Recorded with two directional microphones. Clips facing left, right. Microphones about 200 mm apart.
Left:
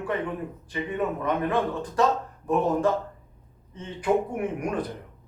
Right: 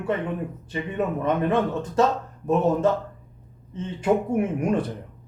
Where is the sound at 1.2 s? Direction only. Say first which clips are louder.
Right 5 dB; 25° right (ahead or behind).